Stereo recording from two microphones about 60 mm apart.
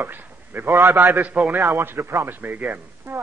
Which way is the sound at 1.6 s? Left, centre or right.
Right.